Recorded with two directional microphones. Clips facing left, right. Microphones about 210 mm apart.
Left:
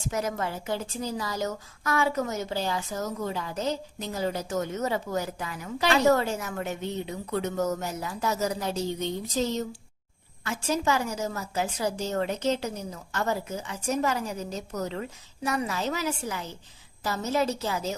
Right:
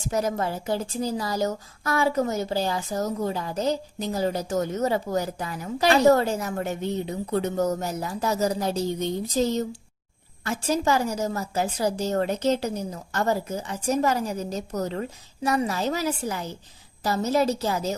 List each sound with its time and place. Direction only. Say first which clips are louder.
0.1 s a woman's voice: right 4 dB; 35° right (ahead or behind)